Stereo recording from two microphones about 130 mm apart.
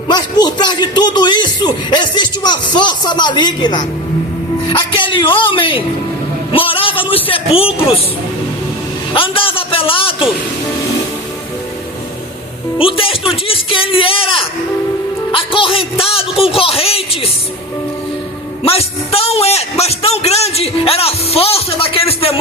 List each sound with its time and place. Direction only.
0.1 s a man's voice: 35° left (ahead or behind)
9.1 s a man's voice: 45° left (ahead or behind)
12.8 s a man's voice: 45° left (ahead or behind)
18.6 s a man's voice: 50° left (ahead or behind)